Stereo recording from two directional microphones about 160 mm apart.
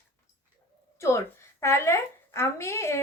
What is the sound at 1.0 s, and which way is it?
A woman's voice, 15° left (ahead or behind).